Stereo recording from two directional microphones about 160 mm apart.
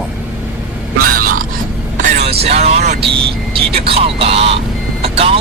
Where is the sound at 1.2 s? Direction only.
60° right (ahead or behind).